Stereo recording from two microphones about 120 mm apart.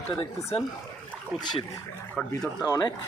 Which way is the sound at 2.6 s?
30° left (ahead or behind).